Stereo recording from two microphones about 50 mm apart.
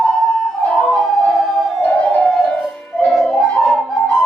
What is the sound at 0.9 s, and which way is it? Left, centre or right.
Music, centre.